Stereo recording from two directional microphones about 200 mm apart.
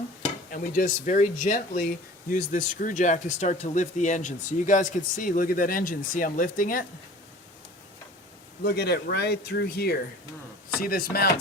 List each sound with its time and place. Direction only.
0.5 s speech: 40° left (ahead or behind)
8.6 s speech: 55° left (ahead or behind)